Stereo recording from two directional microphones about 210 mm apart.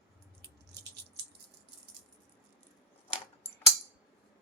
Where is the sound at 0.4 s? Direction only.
50° right (ahead or behind).